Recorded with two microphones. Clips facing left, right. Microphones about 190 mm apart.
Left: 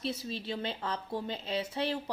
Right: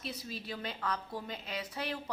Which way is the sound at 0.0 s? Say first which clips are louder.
Left 6 dB; 30° left (ahead or behind).